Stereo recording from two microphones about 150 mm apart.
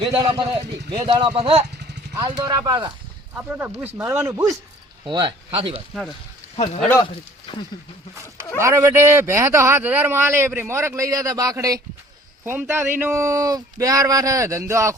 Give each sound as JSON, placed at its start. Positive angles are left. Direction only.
{"t": 0.2, "sound": "speech", "side_deg": -35}
{"t": 2.1, "sound": "speech", "side_deg": -25}
{"t": 3.3, "sound": "speech", "side_deg": -10}
{"t": 5.0, "sound": "speech", "side_deg": -30}
{"t": 5.9, "sound": "speech", "side_deg": 0}
{"t": 8.5, "sound": "speech", "side_deg": -20}